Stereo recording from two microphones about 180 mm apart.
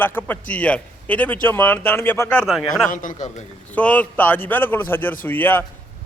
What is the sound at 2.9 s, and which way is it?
Speech, 45° left (ahead or behind).